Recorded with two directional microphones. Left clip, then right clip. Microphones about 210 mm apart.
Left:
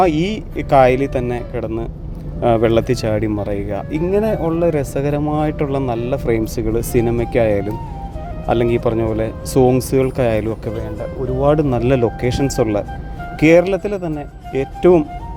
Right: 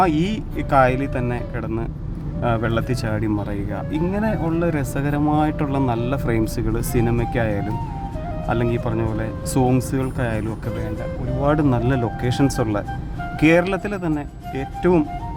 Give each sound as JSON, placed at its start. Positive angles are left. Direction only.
{"t": 0.0, "sound": "speech", "side_deg": 10}
{"t": 2.4, "sound": "speech", "side_deg": 20}
{"t": 9.9, "sound": "speech", "side_deg": 15}
{"t": 10.7, "sound": "speech", "side_deg": 0}
{"t": 14.5, "sound": "speech", "side_deg": 15}